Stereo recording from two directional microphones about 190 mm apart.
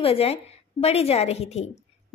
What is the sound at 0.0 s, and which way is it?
A woman's voice, 30° left (ahead or behind).